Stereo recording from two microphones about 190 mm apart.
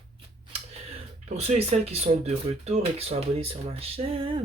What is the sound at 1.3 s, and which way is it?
Speech, 35° right (ahead or behind).